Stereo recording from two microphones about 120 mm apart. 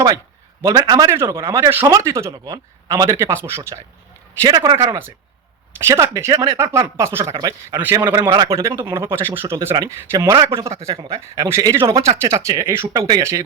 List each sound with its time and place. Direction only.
0.6 s speech: 30° right (ahead or behind)
4.4 s a man's voice: 35° right (ahead or behind)
5.9 s speech: 25° right (ahead or behind)
7.3 s a man's voice: 35° right (ahead or behind)
8.0 s a man's voice: 15° right (ahead or behind)
8.3 s a man's voice: 30° right (ahead or behind)